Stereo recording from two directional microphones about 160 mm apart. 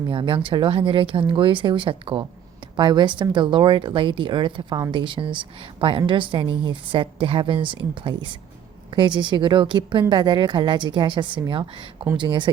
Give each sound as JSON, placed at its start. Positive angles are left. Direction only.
{"t": 0.1, "sound": "a woman's voice", "side_deg": -35}